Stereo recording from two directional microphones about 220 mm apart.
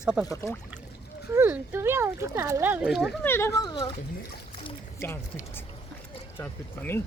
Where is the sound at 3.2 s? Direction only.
10° left (ahead or behind).